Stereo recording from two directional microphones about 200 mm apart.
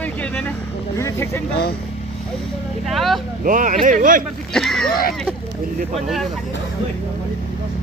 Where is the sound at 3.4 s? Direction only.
40° right (ahead or behind).